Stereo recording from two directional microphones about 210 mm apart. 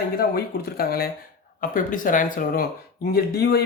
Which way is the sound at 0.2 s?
45° left (ahead or behind).